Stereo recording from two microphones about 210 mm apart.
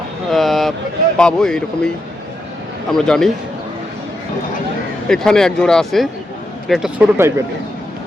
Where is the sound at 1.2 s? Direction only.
5° left (ahead or behind).